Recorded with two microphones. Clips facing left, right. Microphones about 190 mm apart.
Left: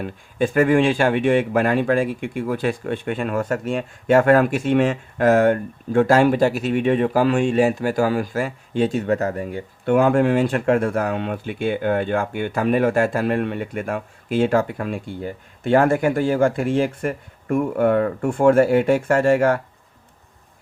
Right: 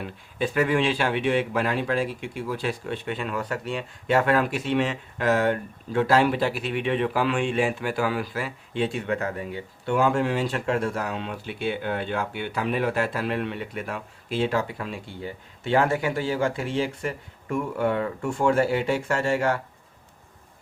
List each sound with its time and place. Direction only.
0.0 s speech: 50° left (ahead or behind)